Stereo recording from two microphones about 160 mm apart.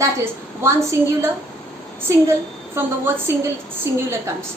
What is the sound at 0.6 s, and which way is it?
Speech, 15° right (ahead or behind).